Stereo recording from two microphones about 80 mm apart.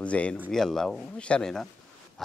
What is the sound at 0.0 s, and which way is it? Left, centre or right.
Speech, centre.